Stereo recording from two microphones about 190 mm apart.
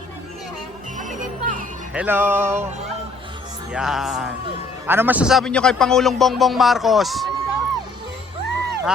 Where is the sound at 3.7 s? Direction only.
Centre (ahead or behind).